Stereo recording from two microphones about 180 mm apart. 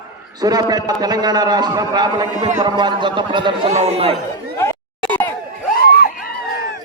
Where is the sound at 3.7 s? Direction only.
40° right (ahead or behind).